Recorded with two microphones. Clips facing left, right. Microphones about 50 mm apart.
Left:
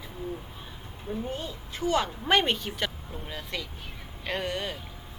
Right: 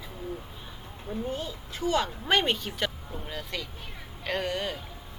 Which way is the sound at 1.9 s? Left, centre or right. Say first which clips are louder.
Left 1 dB; centre.